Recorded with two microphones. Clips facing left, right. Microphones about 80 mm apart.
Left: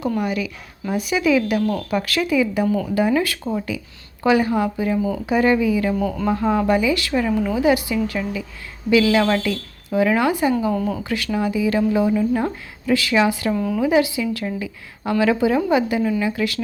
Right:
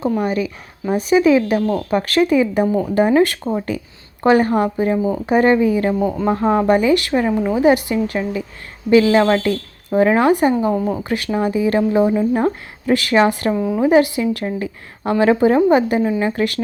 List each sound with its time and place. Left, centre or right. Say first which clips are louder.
0.2 s speech: right 4 dB; right
6.0 s speech: right 3 dB; right
10.6 s speech: right 3 dB; right
11.1 s speech: right 3 dB; right
12.8 s speech: right 3 dB; right
13.5 s speech: right 3 dB; right
13.8 s speech: right 5 dB; right